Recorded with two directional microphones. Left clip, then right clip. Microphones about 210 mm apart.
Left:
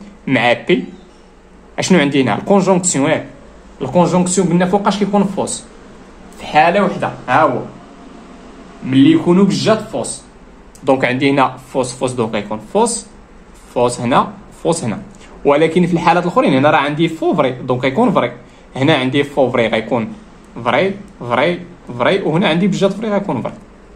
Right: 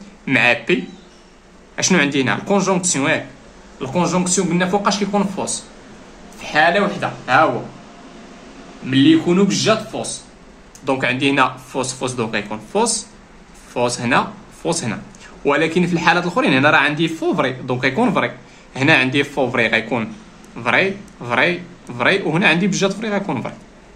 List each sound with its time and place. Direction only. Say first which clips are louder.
0.2 s a man's voice: left 1 dB; 10° left (ahead or behind)
1.8 s a man's voice: left 3 dB; 15° left (ahead or behind)
8.9 s a man's voice: left 3 dB; 20° left (ahead or behind)
10.9 s a man's voice: left 4 dB; 20° left (ahead or behind); by 23.5 s centre (ahead or behind)